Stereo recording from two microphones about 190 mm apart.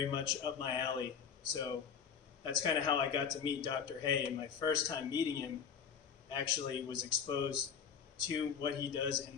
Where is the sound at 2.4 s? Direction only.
25° left (ahead or behind).